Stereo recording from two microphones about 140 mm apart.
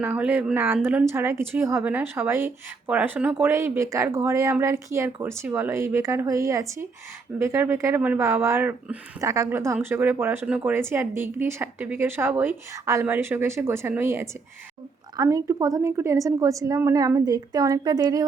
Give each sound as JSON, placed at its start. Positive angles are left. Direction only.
{"t": 0.0, "sound": "a woman's voice", "side_deg": -10}